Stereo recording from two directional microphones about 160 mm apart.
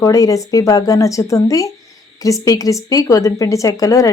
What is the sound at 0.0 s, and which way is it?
A woman's voice, 20° left (ahead or behind).